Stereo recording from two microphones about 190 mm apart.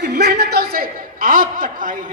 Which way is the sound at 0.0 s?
60° right (ahead or behind).